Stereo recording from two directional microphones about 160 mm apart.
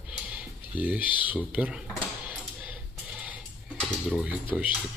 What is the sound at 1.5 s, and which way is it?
Speech, 5° right (ahead or behind).